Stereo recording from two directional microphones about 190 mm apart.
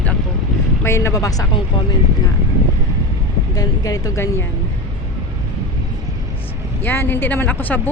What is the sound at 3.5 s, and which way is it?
Speech, 20° left (ahead or behind).